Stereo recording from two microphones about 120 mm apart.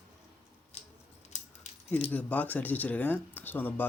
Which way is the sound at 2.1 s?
10° left (ahead or behind).